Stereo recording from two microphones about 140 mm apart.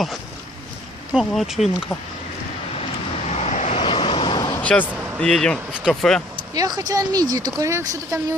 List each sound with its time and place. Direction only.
1.1 s speech: centre (ahead or behind)
3.2 s vehicle: 50° left (ahead or behind)
3.8 s vehicle: 40° left (ahead or behind)
4.6 s speech: 10° left (ahead or behind)
6.5 s speech: 25° right (ahead or behind)